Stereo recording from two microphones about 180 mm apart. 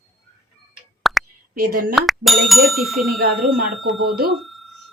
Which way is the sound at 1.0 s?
Centre (ahead or behind).